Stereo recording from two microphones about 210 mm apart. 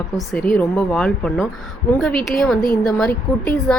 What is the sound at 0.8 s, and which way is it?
Speech, 5° left (ahead or behind).